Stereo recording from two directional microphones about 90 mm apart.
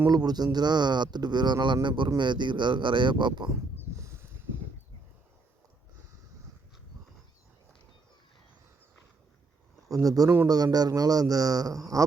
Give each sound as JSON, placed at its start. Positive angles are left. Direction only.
{"t": 0.1, "sound": "speech", "side_deg": -50}
{"t": 3.9, "sound": "a sound", "side_deg": -30}
{"t": 9.9, "sound": "speech", "side_deg": -40}